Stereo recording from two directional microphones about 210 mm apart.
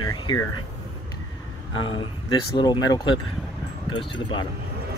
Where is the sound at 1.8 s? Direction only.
25° left (ahead or behind).